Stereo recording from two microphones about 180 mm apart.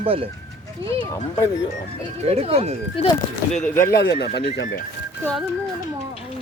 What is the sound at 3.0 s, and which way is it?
Speech, 35° left (ahead or behind).